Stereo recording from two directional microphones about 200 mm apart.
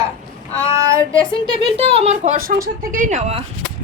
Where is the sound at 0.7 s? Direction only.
15° right (ahead or behind).